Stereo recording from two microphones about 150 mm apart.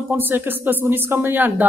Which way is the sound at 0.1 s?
15° right (ahead or behind).